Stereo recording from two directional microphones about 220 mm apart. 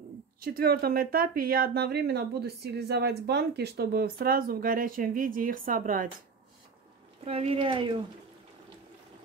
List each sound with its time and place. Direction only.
0.4 s speech: 45° right (ahead or behind)
7.2 s speech: 25° right (ahead or behind)